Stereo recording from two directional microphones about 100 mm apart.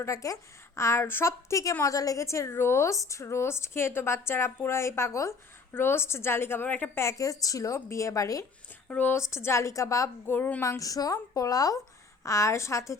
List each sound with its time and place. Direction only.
0.0 s a woman's voice: 35° left (ahead or behind); by 7.0 s 15° left (ahead or behind)
7.0 s a woman's voice: 35° left (ahead or behind)
8.9 s a woman's voice: 20° left (ahead or behind)
10.3 s speech: 20° left (ahead or behind)
10.6 s a woman's voice: 35° left (ahead or behind)